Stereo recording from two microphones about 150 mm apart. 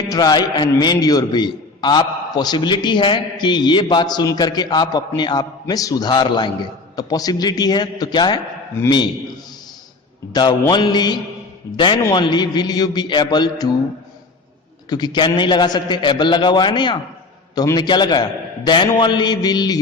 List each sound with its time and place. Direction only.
0.1 s a man's voice: 25° left (ahead or behind)
10.3 s a man's voice: 30° left (ahead or behind)
14.8 s a man's voice: 30° left (ahead or behind)